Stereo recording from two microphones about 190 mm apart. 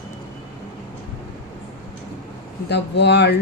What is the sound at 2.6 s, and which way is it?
Speech, 60° left (ahead or behind).